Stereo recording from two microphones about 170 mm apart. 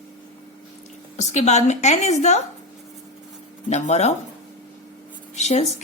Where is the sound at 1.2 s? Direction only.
40° left (ahead or behind).